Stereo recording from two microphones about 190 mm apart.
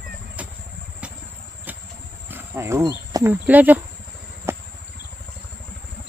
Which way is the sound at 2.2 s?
10° right (ahead or behind).